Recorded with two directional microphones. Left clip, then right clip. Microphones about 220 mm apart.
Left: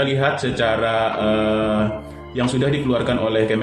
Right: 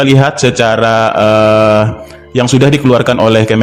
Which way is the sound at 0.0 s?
50° right (ahead or behind).